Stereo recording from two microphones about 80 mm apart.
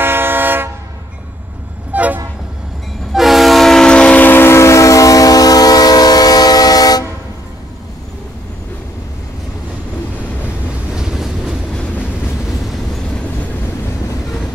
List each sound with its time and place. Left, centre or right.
0.0 s vehicle: right
1.9 s toot: centre
3.1 s train: centre; by 7.1 s left
11.0 s train: centre
12.6 s train: centre